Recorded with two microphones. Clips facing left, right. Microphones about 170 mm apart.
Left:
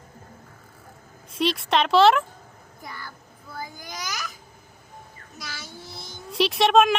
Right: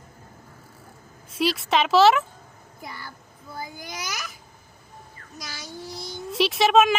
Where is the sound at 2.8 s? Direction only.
15° right (ahead or behind).